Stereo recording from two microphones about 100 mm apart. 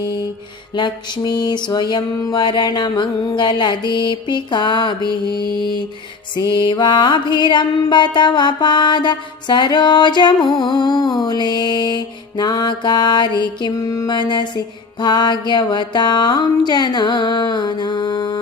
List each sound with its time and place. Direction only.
0.0 s music: 45° left (ahead or behind)